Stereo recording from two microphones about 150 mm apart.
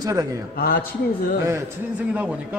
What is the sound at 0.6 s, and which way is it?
Speech, 85° left.